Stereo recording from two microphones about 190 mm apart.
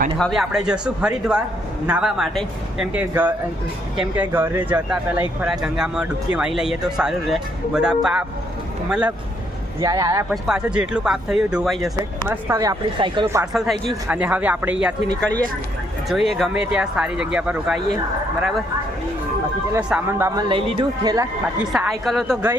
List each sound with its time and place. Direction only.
0.2 s speech: centre (ahead or behind)
9.8 s speech: 20° right (ahead or behind)
10.4 s speech: 5° right (ahead or behind)
12.3 s speech: 15° right (ahead or behind)
13.5 s speech: centre (ahead or behind)
16.0 s speech: centre (ahead or behind)
19.9 s speech: 15° right (ahead or behind)
20.5 s speech: 25° right (ahead or behind)
21.7 s speech: centre (ahead or behind)